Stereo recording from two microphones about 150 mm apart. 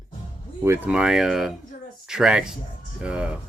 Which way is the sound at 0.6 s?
10° right (ahead or behind).